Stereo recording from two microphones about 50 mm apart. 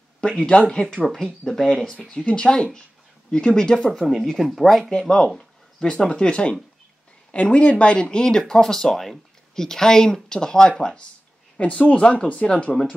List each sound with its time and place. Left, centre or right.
0.2 s speech: centre
1.0 s speech: centre
2.0 s speech: centre
4.9 s speech: centre